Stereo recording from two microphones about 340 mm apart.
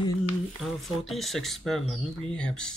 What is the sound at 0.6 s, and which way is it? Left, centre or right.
Speech, centre.